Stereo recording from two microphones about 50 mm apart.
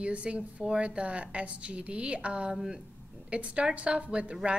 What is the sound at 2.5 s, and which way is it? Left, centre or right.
Speech, centre.